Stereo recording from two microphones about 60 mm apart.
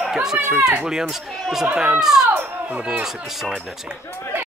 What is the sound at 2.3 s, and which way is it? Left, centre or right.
Speech, right.